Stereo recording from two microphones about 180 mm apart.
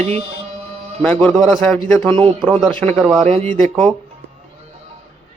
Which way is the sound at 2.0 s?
15° left (ahead or behind).